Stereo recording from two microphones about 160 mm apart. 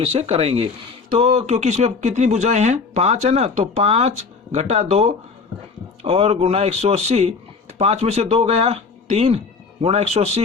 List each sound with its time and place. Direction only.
0.0 s speech: 40° right (ahead or behind)